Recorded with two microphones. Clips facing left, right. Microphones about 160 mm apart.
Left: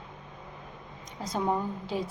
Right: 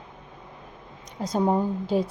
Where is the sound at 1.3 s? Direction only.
35° right (ahead or behind).